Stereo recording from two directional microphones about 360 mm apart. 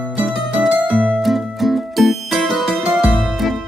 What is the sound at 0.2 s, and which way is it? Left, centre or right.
Music, centre.